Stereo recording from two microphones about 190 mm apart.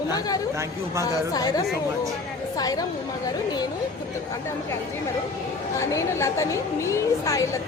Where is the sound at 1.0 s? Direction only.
20° left (ahead or behind).